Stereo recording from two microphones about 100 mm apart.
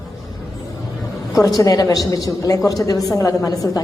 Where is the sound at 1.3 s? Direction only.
35° left (ahead or behind).